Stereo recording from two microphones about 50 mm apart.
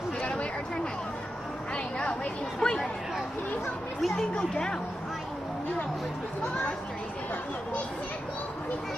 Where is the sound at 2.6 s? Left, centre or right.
Centre.